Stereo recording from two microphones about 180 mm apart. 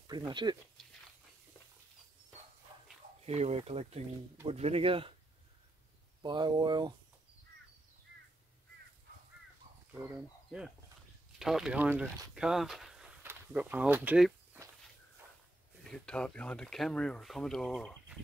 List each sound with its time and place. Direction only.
0.3 s speech: 25° right (ahead or behind)
3.3 s speech: 35° right (ahead or behind)
6.2 s speech: 25° right (ahead or behind)
9.9 s speech: 5° right (ahead or behind)
15.8 s speech: 5° left (ahead or behind)